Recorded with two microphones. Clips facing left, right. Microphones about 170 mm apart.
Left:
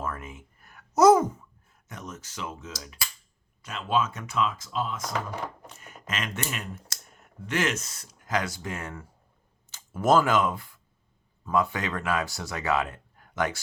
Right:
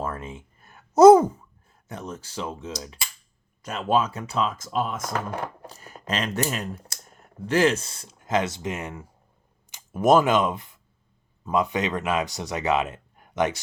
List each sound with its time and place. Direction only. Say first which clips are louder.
0.0 s a sound: right 3 dB; 30° right (ahead or behind)
1.9 s speech: right 5 dB; 30° right (ahead or behind)
3.6 s speech: right 4 dB; 45° right (ahead or behind)
5.6 s speech: right 6 dB; 35° right (ahead or behind); by 13.6 s 20° right (ahead or behind)